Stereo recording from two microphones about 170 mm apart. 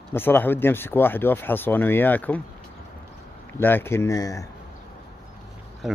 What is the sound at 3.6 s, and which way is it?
Speech, 10° left (ahead or behind).